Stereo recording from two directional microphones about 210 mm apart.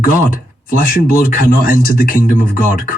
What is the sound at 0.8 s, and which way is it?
A man's voice, 40° left (ahead or behind).